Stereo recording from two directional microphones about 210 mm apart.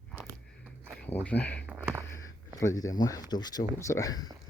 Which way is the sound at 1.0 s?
5° left (ahead or behind).